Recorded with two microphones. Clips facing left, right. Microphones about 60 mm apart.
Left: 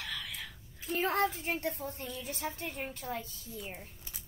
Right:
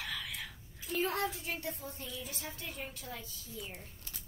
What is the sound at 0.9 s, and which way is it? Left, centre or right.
Speech, left.